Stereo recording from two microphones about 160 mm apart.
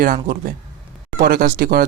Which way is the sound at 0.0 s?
60° right (ahead or behind).